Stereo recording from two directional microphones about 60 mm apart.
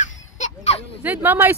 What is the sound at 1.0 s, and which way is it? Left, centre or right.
Speech, right.